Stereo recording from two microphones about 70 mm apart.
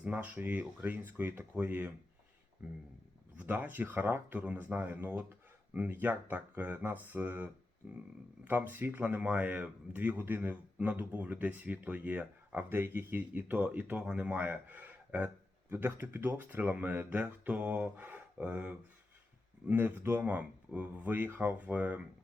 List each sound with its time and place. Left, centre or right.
0.0 s a sound: centre
0.3 s speech: right
7.8 s speech: centre
8.4 s speech: right